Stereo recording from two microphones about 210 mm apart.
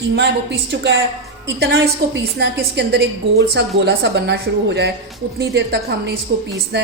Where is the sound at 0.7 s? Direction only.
55° right (ahead or behind).